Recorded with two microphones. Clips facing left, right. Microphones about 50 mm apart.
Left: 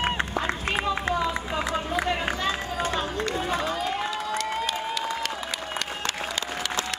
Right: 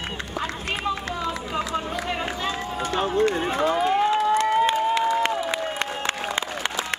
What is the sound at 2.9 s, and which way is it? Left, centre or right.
Run, right.